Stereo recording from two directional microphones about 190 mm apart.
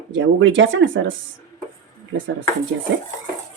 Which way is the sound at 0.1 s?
75° right (ahead or behind).